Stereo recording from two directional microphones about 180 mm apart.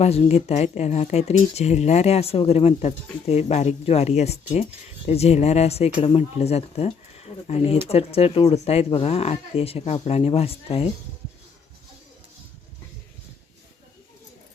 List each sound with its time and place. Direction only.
0.0 s speech: 35° left (ahead or behind)